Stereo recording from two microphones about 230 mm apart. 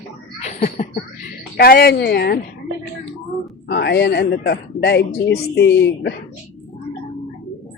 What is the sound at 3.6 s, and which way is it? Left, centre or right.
Speech, left.